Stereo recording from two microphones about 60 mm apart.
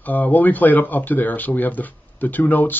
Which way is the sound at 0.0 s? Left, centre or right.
Left.